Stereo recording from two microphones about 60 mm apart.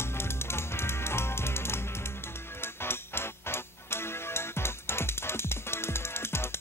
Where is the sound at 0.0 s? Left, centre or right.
Left.